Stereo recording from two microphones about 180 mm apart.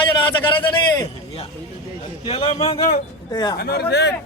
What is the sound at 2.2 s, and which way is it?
Speech, 30° left (ahead or behind).